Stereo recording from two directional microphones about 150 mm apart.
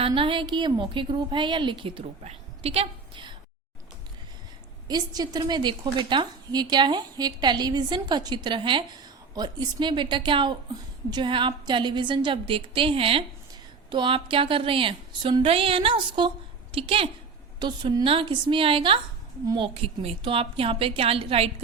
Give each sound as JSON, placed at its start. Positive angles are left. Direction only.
{"t": 0.0, "sound": "a woman's voice", "side_deg": -35}
{"t": 4.9, "sound": "a woman's voice", "side_deg": -25}